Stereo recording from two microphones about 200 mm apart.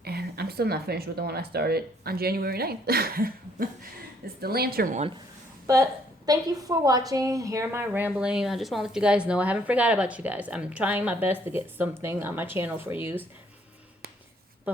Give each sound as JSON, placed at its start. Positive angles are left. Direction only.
{"t": 0.0, "sound": "speech", "side_deg": -50}
{"t": 5.6, "sound": "a woman's voice", "side_deg": -15}